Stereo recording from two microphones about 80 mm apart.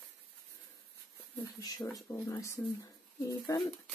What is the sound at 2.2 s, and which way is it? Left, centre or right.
Speech, left.